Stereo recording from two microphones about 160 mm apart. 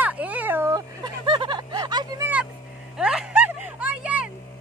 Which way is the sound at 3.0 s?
5° right (ahead or behind).